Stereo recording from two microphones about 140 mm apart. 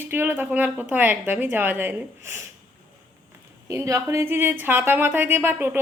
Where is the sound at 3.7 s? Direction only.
20° right (ahead or behind).